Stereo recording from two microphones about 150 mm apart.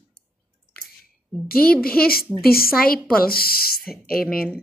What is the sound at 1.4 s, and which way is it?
A woman's voice, 85° left.